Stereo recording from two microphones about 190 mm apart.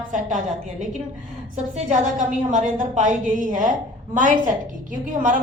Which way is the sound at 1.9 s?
40° right (ahead or behind).